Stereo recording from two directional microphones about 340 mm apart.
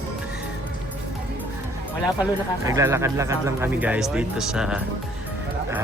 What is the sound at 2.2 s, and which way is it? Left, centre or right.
Speech, centre.